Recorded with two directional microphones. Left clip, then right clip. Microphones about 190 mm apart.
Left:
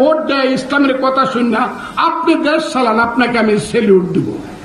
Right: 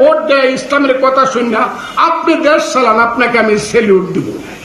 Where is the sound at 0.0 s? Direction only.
55° left (ahead or behind).